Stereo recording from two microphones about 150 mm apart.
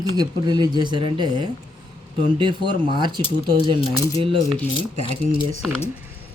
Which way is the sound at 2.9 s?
30° right (ahead or behind).